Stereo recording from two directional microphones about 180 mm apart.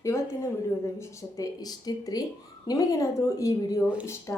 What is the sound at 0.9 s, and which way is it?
Speech, 15° left (ahead or behind).